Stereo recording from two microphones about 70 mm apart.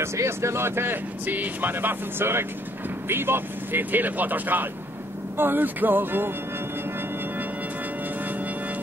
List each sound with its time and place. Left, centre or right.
0.0 s speech: right